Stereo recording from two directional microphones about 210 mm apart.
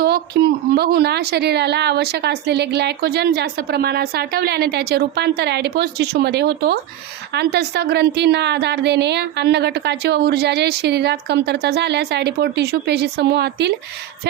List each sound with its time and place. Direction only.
0.0 s a woman's voice: 50° right (ahead or behind)